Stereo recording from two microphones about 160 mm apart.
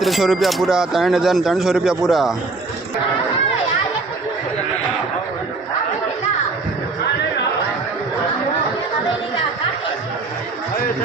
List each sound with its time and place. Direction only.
0.0 s speech: centre (ahead or behind)